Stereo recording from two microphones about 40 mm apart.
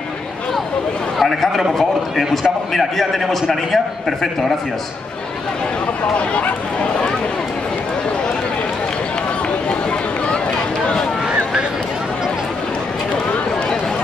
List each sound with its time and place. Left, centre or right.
1.1 s a man's voice: centre
6.1 s speech: left
9.7 s run: left